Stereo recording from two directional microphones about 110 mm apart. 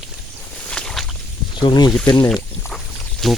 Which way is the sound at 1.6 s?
40° left (ahead or behind).